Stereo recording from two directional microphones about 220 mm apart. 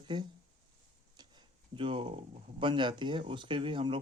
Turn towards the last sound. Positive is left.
turn(degrees=-25)  # may be behind; listen again after turning